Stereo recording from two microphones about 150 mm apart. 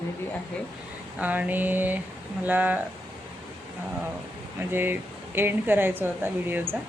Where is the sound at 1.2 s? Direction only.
10° right (ahead or behind).